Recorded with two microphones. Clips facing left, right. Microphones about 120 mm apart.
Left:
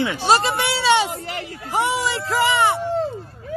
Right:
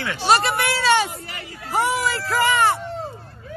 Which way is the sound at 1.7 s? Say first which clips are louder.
Even; 20° left (ahead or behind).